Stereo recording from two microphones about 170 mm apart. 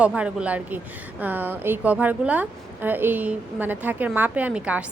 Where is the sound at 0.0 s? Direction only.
5° right (ahead or behind).